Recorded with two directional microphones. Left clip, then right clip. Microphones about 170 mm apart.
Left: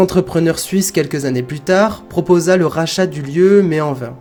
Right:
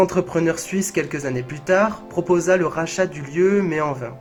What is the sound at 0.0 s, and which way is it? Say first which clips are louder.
Speech: left 4 dB; 35° left (ahead or behind).